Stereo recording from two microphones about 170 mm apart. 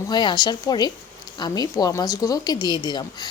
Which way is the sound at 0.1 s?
25° left (ahead or behind).